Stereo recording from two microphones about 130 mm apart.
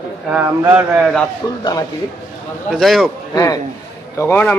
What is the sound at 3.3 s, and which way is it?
Speech, 25° left (ahead or behind).